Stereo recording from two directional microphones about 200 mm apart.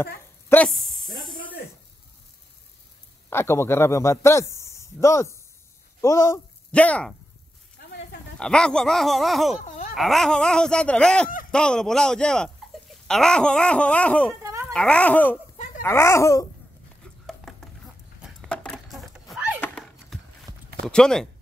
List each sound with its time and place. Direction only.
0.0 s a sound: 10° left (ahead or behind)
0.7 s speech: centre (ahead or behind)
3.3 s a man's voice: 10° left (ahead or behind)
8.4 s speech: 5° left (ahead or behind)
9.7 s babbling: 40° left (ahead or behind)
9.9 s speech: centre (ahead or behind)
14.4 s babbling: 15° right (ahead or behind)
14.7 s a child's voice: 5° left (ahead or behind)
17.5 s a sound: centre (ahead or behind)
19.6 s horse: 5° left (ahead or behind)
20.8 s speech: 5° left (ahead or behind)